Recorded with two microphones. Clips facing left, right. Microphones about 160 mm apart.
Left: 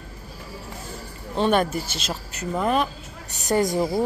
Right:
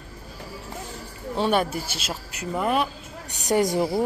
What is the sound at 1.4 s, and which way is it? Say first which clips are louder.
Speech: left 2 dB; 10° right (ahead or behind).